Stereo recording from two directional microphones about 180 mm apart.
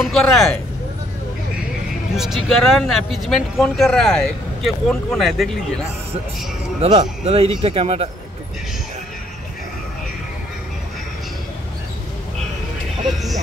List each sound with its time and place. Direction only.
0.0 s speech: centre (ahead or behind)
2.1 s speech: centre (ahead or behind)
6.8 s a man's voice: 35° right (ahead or behind)